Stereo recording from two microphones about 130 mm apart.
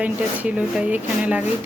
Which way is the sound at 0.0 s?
10° right (ahead or behind).